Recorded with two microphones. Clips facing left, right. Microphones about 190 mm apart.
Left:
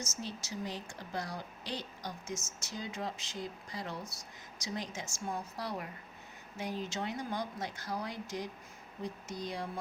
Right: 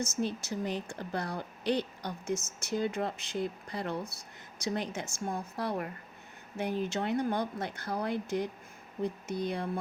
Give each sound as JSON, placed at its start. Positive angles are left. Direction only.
{"t": 0.0, "sound": "speech", "side_deg": -55}